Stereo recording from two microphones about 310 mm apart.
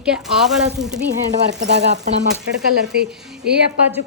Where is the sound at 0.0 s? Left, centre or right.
Centre.